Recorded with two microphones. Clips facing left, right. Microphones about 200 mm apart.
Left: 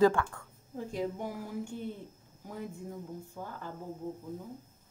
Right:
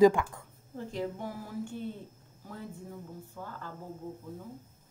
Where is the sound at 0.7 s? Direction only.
10° left (ahead or behind).